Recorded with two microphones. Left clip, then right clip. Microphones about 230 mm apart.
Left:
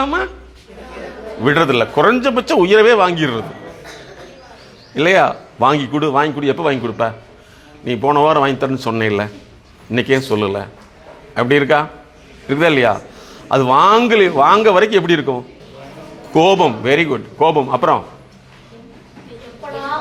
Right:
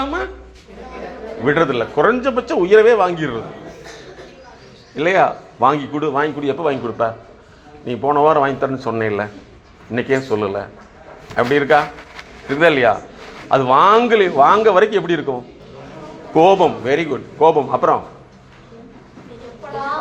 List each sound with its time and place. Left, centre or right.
0.0 s a sound: left
1.5 s a man's voice: left
4.9 s a man's voice: left